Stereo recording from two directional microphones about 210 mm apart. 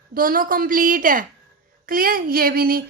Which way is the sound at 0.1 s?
45° right (ahead or behind).